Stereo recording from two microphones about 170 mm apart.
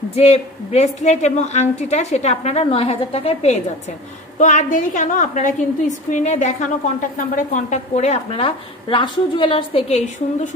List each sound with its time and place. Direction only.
0.1 s a woman's voice: 40° left (ahead or behind)